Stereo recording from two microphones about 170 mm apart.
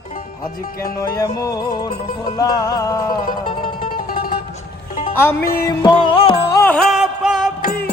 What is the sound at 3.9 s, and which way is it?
Music, 60° left (ahead or behind).